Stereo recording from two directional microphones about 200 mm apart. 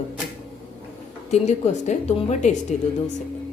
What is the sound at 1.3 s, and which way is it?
A woman's voice, 35° left (ahead or behind).